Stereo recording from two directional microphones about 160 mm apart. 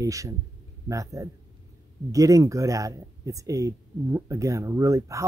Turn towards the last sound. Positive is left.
turn(degrees=-20)  # may be behind; listen again after turning